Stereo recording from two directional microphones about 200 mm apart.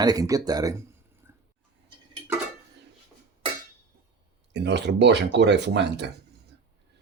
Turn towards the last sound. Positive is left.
turn(degrees=-60)  # may be behind; listen again after turning